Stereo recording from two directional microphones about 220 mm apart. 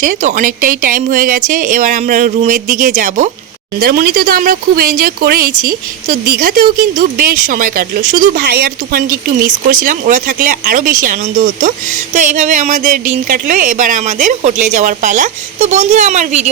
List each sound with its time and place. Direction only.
0.0 s speech: 35° right (ahead or behind)